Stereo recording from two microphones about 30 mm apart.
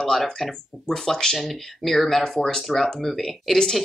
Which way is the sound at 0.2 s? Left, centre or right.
Centre.